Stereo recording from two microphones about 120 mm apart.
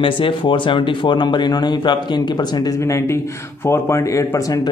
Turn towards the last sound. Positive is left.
turn(degrees=30)  # may be behind; listen again after turning